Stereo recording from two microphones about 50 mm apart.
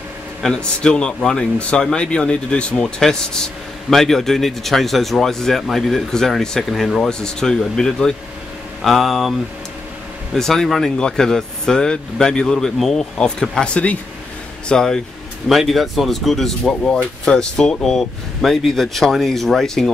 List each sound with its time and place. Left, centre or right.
0.5 s speech: centre
3.0 s speech: centre
7.0 s speech: centre
14.7 s speech: centre
15.4 s speech: centre